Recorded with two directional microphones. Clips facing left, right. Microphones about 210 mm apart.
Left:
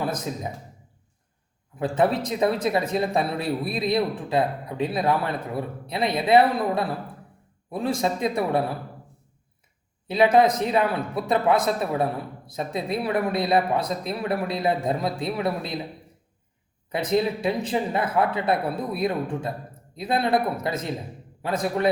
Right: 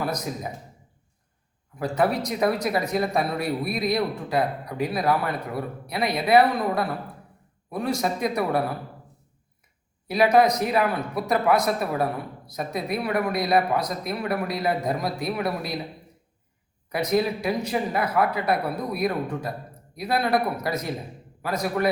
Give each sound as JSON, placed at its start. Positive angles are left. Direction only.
{"t": 1.8, "sound": "a man's voice", "side_deg": 25}
{"t": 10.1, "sound": "a man's voice", "side_deg": 25}
{"t": 17.1, "sound": "a man's voice", "side_deg": 25}